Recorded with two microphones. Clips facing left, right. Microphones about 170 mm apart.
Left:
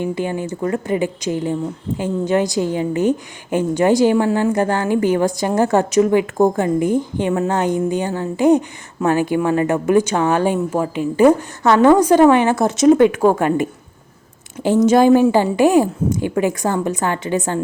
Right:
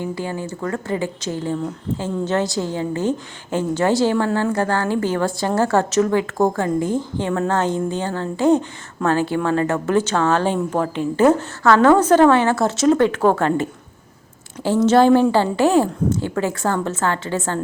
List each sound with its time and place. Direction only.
0.0 s a woman's voice: 20° left (ahead or behind)